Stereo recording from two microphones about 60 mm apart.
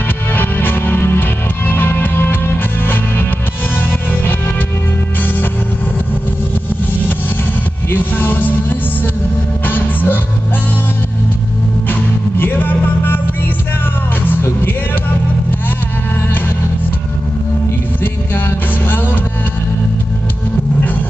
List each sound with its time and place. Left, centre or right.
0.3 s music: left
7.9 s music: left
11.9 s music: left
14.2 s music: left